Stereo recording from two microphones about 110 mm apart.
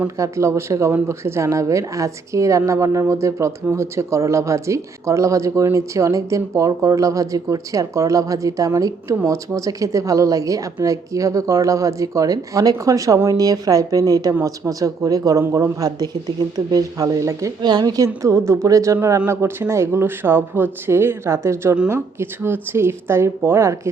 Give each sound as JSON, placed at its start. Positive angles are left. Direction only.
{"t": 0.2, "sound": "a woman's voice", "side_deg": -25}